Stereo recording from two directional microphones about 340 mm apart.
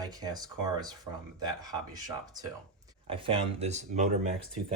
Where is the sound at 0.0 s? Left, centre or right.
Centre.